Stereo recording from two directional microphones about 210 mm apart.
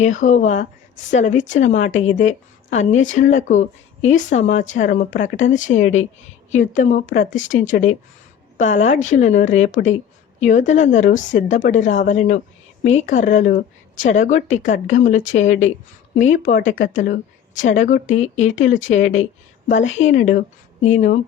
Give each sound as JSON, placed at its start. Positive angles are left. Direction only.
{"t": 0.0, "sound": "a woman's voice", "side_deg": 35}